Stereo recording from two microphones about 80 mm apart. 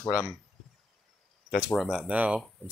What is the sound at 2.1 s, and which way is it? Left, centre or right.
Speech, centre.